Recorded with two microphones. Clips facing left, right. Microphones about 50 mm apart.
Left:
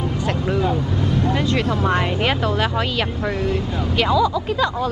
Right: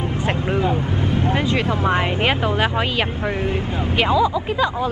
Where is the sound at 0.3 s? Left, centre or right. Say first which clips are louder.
Even; right.